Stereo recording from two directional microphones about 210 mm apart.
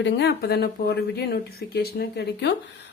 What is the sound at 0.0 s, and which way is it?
A woman's voice, 55° left (ahead or behind).